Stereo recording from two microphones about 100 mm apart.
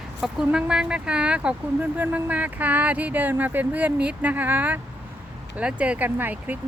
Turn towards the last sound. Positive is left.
turn(degrees=-15)  # may be behind; listen again after turning